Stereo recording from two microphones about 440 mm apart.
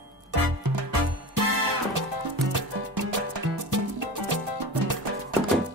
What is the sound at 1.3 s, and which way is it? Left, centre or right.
Music, right.